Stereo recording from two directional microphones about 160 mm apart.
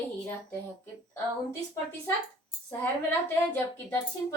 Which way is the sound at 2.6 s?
10° left (ahead or behind).